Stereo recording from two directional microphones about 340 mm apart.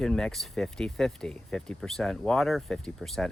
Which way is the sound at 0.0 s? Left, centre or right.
Centre.